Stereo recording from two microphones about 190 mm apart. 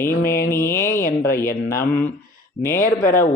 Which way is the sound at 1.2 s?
15° left (ahead or behind).